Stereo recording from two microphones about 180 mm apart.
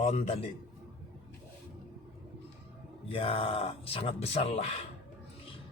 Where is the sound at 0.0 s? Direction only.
35° left (ahead or behind).